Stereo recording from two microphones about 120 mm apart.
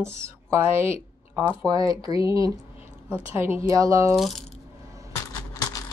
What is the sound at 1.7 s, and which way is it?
Speech, 30° right (ahead or behind).